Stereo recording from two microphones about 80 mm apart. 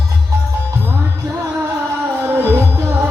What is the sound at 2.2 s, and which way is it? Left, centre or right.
Music, right.